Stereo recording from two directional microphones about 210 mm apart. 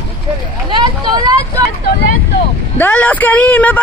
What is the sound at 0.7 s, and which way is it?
Vehicle, 20° right (ahead or behind).